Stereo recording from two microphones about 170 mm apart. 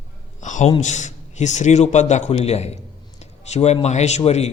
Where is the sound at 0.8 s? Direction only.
45° left (ahead or behind).